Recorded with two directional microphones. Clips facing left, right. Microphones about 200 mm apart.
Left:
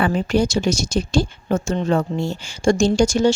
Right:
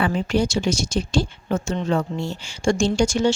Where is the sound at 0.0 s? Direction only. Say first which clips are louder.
Left 2 dB; 45° left (ahead or behind).